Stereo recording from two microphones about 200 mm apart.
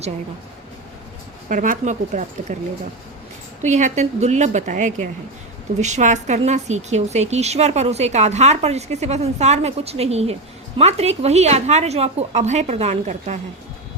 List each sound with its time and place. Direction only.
1.5 s a woman's voice: 40° right (ahead or behind)
3.6 s a woman's voice: 35° right (ahead or behind)